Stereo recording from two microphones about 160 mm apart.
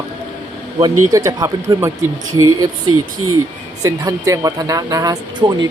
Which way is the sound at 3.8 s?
20° right (ahead or behind).